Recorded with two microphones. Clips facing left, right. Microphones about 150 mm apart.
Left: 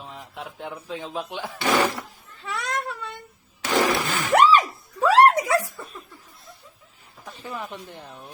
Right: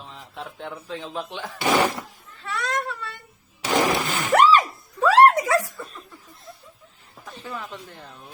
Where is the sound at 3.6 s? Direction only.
20° right (ahead or behind).